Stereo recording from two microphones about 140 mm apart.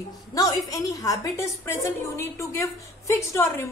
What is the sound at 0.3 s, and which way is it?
A woman's voice, 25° left (ahead or behind).